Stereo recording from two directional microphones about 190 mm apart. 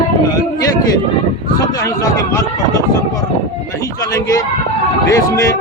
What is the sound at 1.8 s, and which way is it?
Speech, 15° left (ahead or behind).